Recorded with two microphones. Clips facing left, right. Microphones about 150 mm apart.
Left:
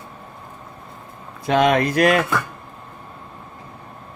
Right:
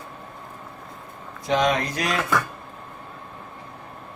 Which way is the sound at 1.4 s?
60° left (ahead or behind).